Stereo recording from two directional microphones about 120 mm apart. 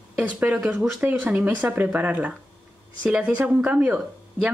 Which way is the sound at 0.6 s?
5° right (ahead or behind).